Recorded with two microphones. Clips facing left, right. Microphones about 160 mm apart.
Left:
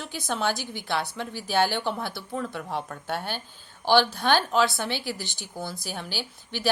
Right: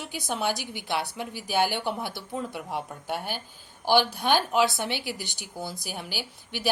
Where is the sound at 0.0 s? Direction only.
15° right (ahead or behind).